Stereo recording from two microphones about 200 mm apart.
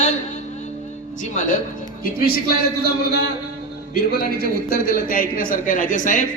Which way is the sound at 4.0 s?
50° left (ahead or behind).